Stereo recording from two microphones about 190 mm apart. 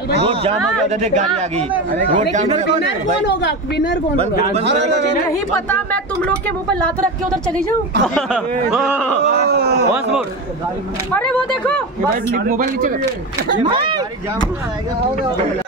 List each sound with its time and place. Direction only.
0.2 s speech: 30° right (ahead or behind)
3.3 s speech: 65° left (ahead or behind)
5.7 s speech: 5° left (ahead or behind)
8.3 s speech: 5° right (ahead or behind)
9.5 s speech: 55° right (ahead or behind)
11.1 s speech: 5° left (ahead or behind)
12.3 s speech: 50° right (ahead or behind)
13.7 s speech: 25° right (ahead or behind)